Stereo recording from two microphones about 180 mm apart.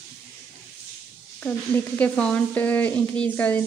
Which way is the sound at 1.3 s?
5° left (ahead or behind).